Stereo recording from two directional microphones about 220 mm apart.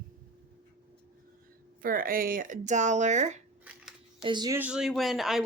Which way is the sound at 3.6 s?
Centre (ahead or behind).